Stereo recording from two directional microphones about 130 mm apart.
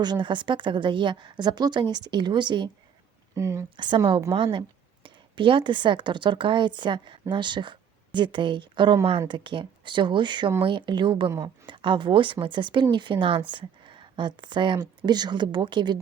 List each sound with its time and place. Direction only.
0.0 s a woman's voice: 35° right (ahead or behind)
3.3 s speech: 20° right (ahead or behind)
3.8 s a woman's voice: 35° right (ahead or behind)